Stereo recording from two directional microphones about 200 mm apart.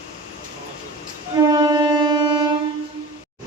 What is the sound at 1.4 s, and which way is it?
Music, 20° right (ahead or behind).